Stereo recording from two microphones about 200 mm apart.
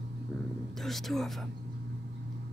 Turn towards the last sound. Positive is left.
turn(degrees=0)  # may be behind; listen again after turning